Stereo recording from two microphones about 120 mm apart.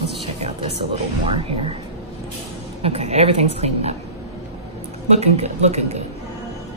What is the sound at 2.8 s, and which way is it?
A woman's voice, 60° right (ahead or behind).